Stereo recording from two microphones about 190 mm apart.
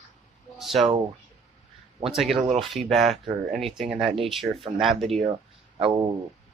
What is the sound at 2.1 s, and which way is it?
Speech, centre (ahead or behind).